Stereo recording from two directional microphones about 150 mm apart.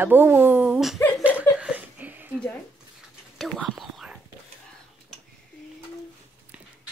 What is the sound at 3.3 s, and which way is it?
Whispering, centre (ahead or behind).